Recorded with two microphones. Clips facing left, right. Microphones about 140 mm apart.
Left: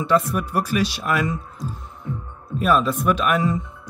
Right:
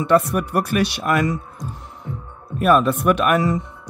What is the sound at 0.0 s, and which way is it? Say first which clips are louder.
Speech: right 3 dB; 65° right (ahead or behind).